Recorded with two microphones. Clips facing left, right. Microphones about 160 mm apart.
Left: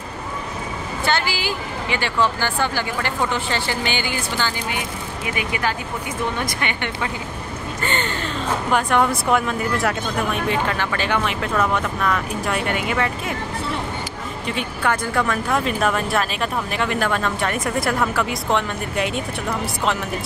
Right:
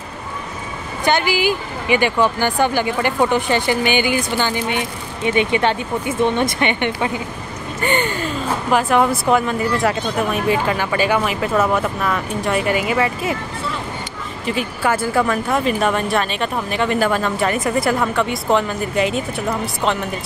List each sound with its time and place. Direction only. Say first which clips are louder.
1.0 s speech: right 6 dB; 15° right (ahead or behind)
14.4 s speech: right 3 dB; 5° right (ahead or behind)